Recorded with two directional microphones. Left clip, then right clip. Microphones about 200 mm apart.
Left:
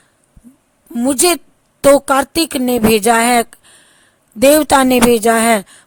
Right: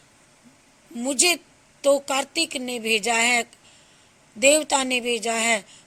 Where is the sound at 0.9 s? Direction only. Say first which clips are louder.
Left 8 dB; 50° left (ahead or behind).